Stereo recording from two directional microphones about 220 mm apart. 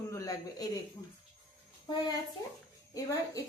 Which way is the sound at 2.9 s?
15° left (ahead or behind).